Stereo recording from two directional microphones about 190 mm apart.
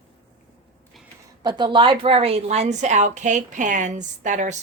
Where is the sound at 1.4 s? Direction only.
25° right (ahead or behind).